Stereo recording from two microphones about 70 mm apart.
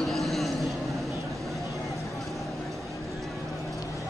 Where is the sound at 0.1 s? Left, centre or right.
Centre.